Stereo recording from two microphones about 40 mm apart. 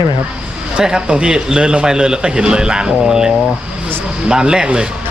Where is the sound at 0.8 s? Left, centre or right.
Right.